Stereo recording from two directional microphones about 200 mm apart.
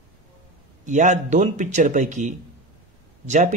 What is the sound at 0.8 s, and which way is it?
Speech, 40° right (ahead or behind).